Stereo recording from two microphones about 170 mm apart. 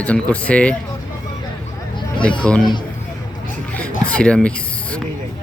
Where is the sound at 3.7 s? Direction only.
5° left (ahead or behind).